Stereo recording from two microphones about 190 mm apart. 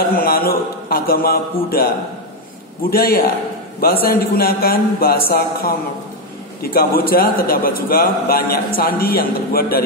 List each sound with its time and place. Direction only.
0.0 s a man's voice: 50° left (ahead or behind)
6.6 s a man's voice: 50° left (ahead or behind)